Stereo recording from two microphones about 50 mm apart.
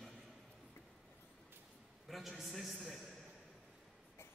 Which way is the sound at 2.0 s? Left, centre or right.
Centre.